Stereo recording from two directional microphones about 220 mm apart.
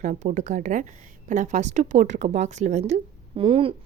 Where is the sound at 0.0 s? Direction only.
35° right (ahead or behind).